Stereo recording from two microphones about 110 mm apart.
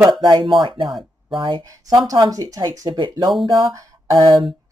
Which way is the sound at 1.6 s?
30° right (ahead or behind).